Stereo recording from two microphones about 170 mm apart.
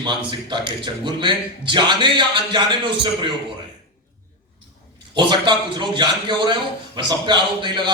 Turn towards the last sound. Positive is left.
turn(degrees=-25)  # may be behind; listen again after turning